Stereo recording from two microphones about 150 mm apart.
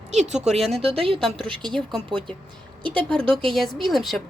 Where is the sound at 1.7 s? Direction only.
5° left (ahead or behind).